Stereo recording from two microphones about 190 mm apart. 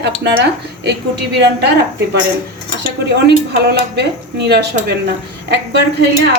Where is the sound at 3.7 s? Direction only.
60° right (ahead or behind).